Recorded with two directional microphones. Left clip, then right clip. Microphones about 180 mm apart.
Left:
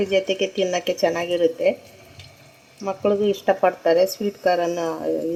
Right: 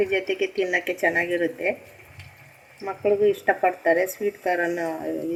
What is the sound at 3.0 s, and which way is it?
Speech, 45° left (ahead or behind).